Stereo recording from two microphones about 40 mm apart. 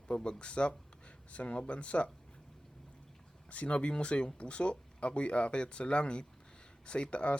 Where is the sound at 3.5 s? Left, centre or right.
Left.